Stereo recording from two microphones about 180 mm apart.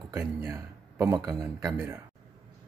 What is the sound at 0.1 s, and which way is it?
Speech, 15° right (ahead or behind).